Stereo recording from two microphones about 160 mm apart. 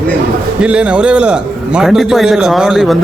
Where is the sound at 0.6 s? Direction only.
5° right (ahead or behind).